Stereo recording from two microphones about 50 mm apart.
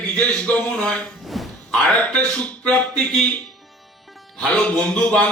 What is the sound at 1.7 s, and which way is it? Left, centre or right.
A man's voice, left.